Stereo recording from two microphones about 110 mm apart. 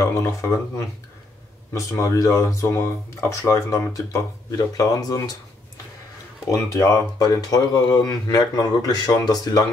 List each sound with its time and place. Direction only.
0.0 s speech: 25° left (ahead or behind)
6.5 s speech: 30° left (ahead or behind)